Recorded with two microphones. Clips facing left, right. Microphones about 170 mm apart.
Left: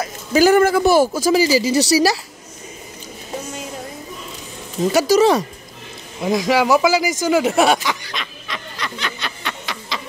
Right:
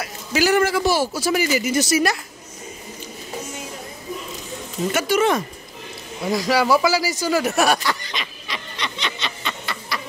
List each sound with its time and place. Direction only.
0.3 s a man's voice: 45° left (ahead or behind)
1.3 s speech: 30° left (ahead or behind)
4.9 s speech: 35° left (ahead or behind)
6.2 s speech: 20° left (ahead or behind)
8.1 s snicker: centre (ahead or behind)
9.4 s a sound: 15° left (ahead or behind)